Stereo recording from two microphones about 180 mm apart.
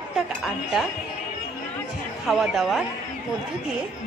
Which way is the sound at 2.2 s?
Centre (ahead or behind).